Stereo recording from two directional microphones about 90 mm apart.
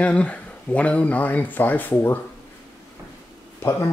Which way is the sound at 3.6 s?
30° left (ahead or behind).